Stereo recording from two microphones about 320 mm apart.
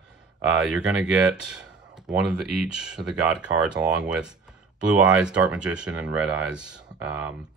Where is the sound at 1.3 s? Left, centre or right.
Centre.